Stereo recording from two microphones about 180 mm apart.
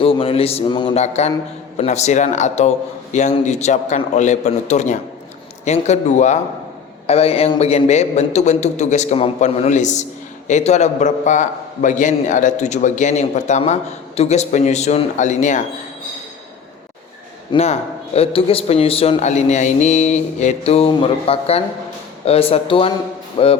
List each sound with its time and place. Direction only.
0.0 s speech: 30° left (ahead or behind)
17.5 s speech: 35° left (ahead or behind)